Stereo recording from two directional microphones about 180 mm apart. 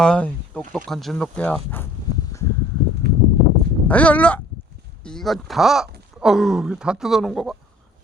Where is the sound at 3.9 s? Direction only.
10° left (ahead or behind).